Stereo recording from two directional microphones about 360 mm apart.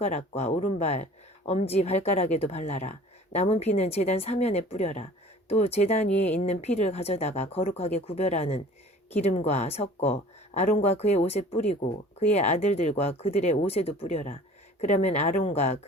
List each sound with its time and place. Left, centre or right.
0.0 s speech: centre